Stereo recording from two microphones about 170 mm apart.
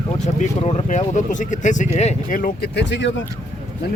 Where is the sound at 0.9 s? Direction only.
45° left (ahead or behind).